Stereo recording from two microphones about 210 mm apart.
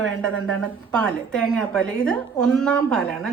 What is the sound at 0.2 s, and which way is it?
A woman's voice, 5° left (ahead or behind).